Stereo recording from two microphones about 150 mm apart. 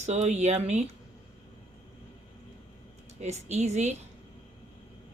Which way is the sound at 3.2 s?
50° right (ahead or behind).